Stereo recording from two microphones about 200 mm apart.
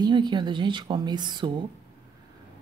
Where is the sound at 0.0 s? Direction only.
20° right (ahead or behind).